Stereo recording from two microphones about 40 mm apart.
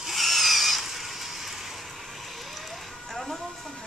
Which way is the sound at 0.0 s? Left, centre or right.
Centre.